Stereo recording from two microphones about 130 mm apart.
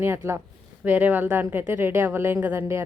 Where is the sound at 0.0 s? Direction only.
20° right (ahead or behind).